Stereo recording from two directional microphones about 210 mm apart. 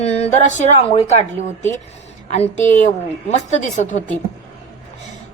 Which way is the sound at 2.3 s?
35° left (ahead or behind).